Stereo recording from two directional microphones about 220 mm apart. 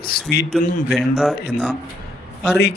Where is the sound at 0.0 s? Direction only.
45° left (ahead or behind).